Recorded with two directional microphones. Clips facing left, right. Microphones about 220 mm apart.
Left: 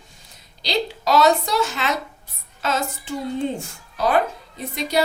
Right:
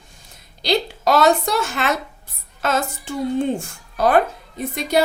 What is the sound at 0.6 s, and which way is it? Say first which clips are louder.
A woman's voice: right 4 dB; 55° right (ahead or behind).